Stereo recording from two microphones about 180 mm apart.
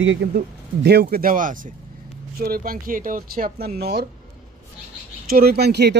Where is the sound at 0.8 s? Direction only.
60° right (ahead or behind).